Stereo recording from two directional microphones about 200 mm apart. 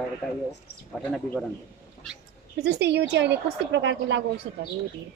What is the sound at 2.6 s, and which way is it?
A woman's voice, 60° right (ahead or behind).